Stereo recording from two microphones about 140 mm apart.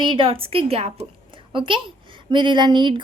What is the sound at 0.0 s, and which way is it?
A woman's voice, 35° right (ahead or behind).